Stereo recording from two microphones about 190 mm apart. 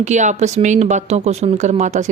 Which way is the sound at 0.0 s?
40° right (ahead or behind).